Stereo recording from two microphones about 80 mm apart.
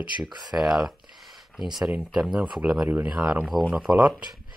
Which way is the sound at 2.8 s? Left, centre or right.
Right.